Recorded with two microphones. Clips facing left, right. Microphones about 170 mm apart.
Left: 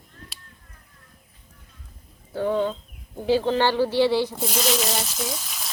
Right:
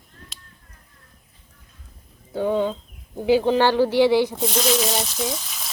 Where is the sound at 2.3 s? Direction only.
15° right (ahead or behind).